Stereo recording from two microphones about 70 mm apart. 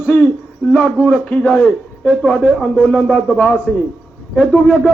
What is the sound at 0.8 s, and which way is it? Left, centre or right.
Speech, centre.